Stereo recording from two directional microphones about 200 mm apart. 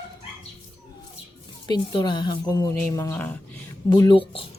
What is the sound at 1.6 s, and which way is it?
Speech, 20° left (ahead or behind).